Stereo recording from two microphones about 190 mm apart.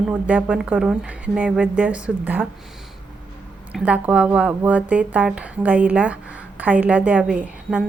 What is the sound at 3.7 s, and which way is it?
Speech, 5° right (ahead or behind).